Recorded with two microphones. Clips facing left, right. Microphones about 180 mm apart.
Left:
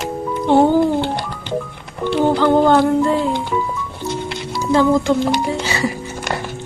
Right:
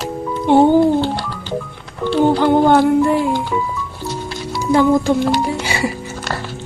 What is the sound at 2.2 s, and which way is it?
Humming, 15° right (ahead or behind).